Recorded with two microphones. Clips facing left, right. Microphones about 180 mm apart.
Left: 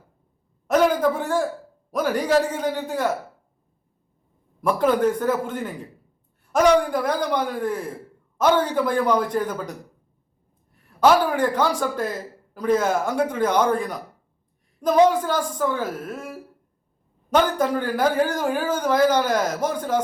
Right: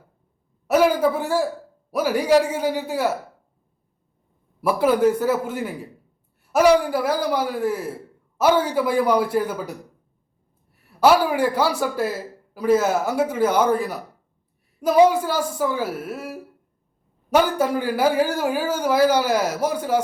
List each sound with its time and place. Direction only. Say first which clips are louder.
0.7 s speech: right 1 dB; 10° right (ahead or behind)
4.6 s speech: right 2 dB; 10° right (ahead or behind)
10.8 s speech: right 1 dB; 10° right (ahead or behind)